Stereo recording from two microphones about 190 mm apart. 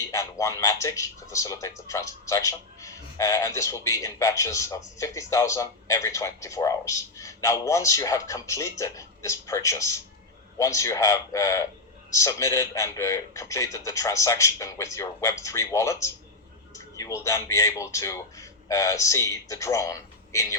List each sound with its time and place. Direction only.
0.1 s speech: 15° left (ahead or behind)
16.7 s a sound: 15° left (ahead or behind)
17.2 s speech: 15° left (ahead or behind)